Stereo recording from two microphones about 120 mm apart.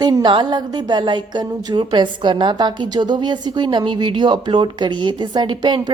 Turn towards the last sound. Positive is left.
turn(degrees=-40)  # may be behind; listen again after turning